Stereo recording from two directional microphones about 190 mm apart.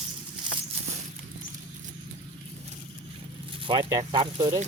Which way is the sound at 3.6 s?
25° right (ahead or behind).